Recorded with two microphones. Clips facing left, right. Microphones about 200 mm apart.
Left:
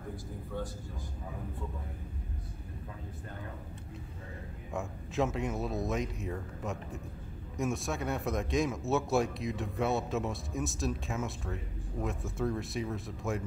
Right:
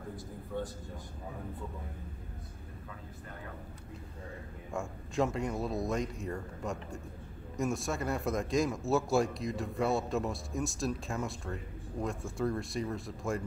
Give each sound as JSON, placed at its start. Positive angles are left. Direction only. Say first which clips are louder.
{"t": 4.7, "sound": "a man's voice", "louder": "even", "side_deg": 0}